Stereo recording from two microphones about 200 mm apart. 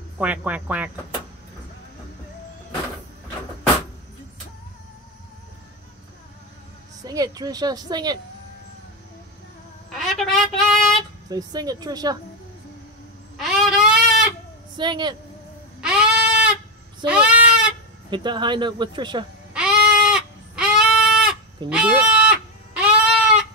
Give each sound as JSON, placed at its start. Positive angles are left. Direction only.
{"t": 0.2, "sound": "speech", "side_deg": -5}
{"t": 7.0, "sound": "a woman's voice", "side_deg": -20}
{"t": 9.9, "sound": "a sound", "side_deg": 0}
{"t": 11.2, "sound": "a woman's voice", "side_deg": -20}
{"t": 13.4, "sound": "goat", "side_deg": 0}
{"t": 14.8, "sound": "a woman's voice", "side_deg": -20}
{"t": 15.8, "sound": "goat", "side_deg": -5}
{"t": 18.1, "sound": "a woman's voice", "side_deg": -25}
{"t": 19.5, "sound": "goat", "side_deg": -5}
{"t": 21.6, "sound": "a sound", "side_deg": -5}